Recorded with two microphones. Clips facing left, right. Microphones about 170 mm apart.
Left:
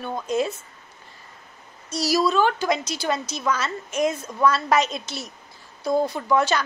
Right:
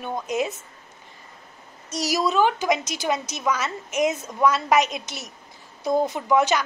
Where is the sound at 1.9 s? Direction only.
20° right (ahead or behind).